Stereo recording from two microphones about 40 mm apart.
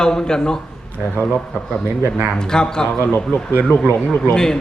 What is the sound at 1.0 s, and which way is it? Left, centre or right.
Speech, centre.